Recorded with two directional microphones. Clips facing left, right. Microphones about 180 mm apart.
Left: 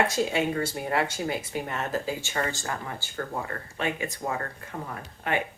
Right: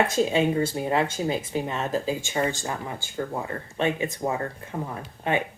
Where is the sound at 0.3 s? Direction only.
20° right (ahead or behind).